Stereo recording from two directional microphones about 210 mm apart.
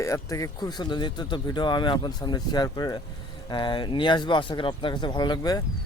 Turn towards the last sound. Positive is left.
turn(degrees=20)  # may be behind; listen again after turning